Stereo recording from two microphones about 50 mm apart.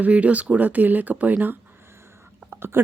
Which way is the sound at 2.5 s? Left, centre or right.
Right.